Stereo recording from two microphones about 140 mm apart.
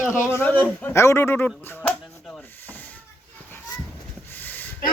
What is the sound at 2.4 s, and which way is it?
Rub, 15° left (ahead or behind).